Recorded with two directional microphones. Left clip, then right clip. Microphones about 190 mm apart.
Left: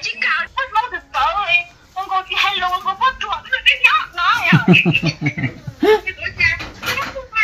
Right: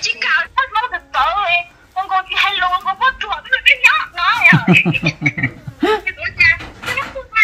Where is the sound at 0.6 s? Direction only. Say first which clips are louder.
Right 2 dB; 15° right (ahead or behind).